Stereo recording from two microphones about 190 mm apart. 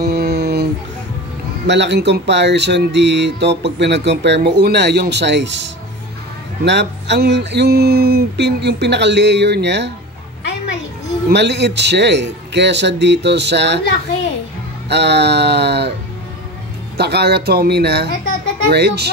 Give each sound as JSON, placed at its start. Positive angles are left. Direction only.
{"t": 0.0, "sound": "a sound", "side_deg": -55}
{"t": 1.7, "sound": "speech", "side_deg": -65}
{"t": 11.2, "sound": "speech", "side_deg": -65}
{"t": 14.9, "sound": "speech", "side_deg": -65}
{"t": 16.9, "sound": "speech", "side_deg": -60}